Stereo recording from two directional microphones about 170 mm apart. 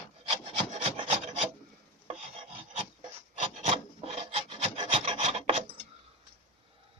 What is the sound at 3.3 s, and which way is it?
Rub, 40° right (ahead or behind).